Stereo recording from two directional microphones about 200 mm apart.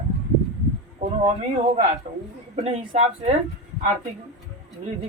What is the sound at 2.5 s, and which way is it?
Speech, 30° right (ahead or behind).